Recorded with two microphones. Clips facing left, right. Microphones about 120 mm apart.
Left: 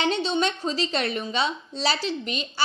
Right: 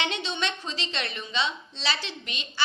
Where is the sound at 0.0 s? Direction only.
35° left (ahead or behind).